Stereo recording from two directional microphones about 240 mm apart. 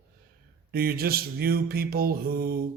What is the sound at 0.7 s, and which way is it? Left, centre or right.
Speech, right.